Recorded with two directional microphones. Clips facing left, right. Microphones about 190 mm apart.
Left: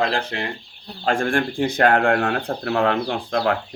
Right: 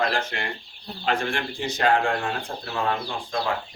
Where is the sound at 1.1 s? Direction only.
50° left (ahead or behind).